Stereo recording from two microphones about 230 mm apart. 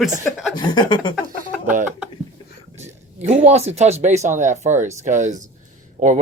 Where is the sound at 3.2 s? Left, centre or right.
Right.